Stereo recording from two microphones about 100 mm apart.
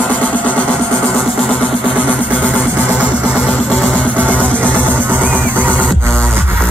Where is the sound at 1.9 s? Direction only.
15° left (ahead or behind).